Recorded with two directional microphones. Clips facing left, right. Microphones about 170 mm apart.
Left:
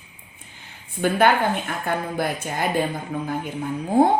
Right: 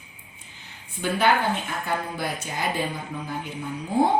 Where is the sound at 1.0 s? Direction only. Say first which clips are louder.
Left 4 dB; 50° left (ahead or behind).